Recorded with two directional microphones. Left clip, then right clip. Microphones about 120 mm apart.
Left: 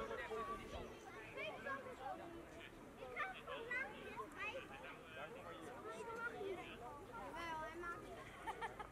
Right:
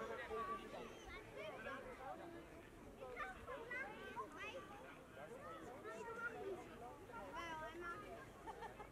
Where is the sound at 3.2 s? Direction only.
35° left (ahead or behind).